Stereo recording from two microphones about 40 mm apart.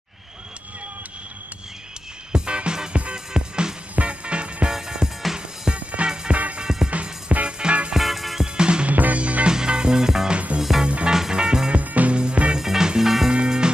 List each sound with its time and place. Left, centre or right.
2.3 s music: right
4.6 s music: centre
5.7 s music: right
6.6 s music: centre
6.9 s music: right
7.9 s music: centre
8.5 s music: right
8.8 s music: right
9.5 s music: centre
10.3 s music: right
11.1 s music: centre
11.7 s music: right
12.2 s music: right
12.5 s music: centre